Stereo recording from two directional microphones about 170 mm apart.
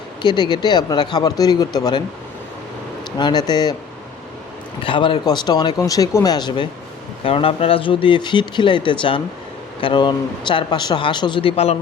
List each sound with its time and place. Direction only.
0.2 s speech: 25° left (ahead or behind)
3.2 s speech: 25° left (ahead or behind)
4.8 s speech: 30° left (ahead or behind)